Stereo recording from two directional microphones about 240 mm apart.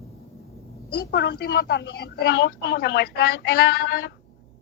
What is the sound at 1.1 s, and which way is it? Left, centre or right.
A woman's voice, left.